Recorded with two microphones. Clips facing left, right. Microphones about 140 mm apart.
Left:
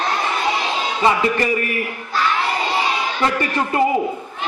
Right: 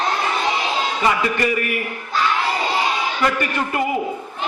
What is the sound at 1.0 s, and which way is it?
Speech, 25° left (ahead or behind).